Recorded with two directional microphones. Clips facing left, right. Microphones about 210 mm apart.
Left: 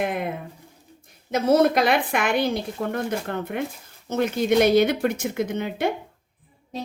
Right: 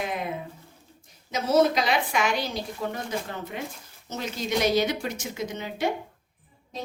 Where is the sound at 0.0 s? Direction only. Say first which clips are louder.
Left 4 dB; 55° left (ahead or behind).